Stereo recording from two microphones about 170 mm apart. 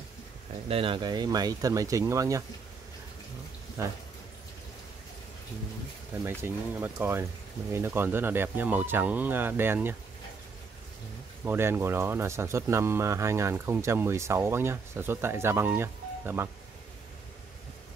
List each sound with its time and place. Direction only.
0.7 s speech: 30° right (ahead or behind)
3.8 s speech: 15° right (ahead or behind)
6.2 s speech: 15° right (ahead or behind)
11.4 s speech: 15° right (ahead or behind)